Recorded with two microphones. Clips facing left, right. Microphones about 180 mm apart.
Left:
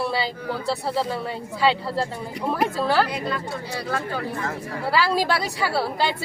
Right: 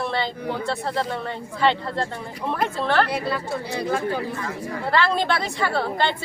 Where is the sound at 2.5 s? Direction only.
10° left (ahead or behind).